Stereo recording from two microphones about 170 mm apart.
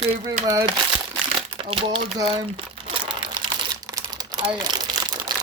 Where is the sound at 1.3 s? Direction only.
30° right (ahead or behind).